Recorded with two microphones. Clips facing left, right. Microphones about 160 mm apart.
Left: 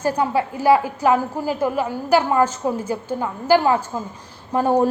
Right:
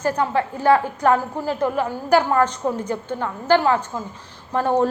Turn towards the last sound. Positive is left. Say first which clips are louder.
# left 2 dB
turn(degrees=10)  # may be behind; listen again after turning